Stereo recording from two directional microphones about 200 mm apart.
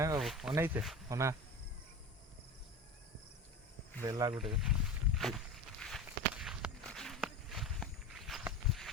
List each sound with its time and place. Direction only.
0.2 s speech: centre (ahead or behind)
0.5 s speech: 10° right (ahead or behind)
4.0 s speech: 20° right (ahead or behind)
4.4 s speech: centre (ahead or behind)
5.8 s walk: centre (ahead or behind)